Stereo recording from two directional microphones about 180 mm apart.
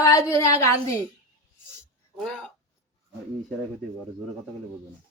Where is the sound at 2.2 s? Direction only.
Centre (ahead or behind).